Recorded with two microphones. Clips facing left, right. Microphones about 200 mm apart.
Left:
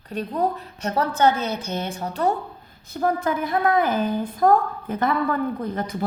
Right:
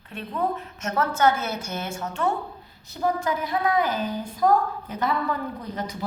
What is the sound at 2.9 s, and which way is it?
A woman's voice, 55° left (ahead or behind).